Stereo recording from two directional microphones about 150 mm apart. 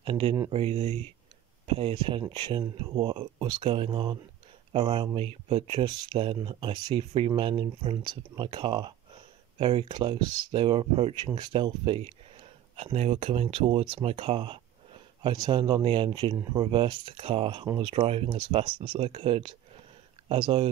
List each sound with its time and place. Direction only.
0.0 s speech: 35° right (ahead or behind)
11.2 s speech: 30° right (ahead or behind)